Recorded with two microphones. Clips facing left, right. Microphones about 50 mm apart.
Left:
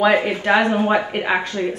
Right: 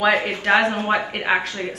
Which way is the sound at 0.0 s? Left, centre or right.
Centre.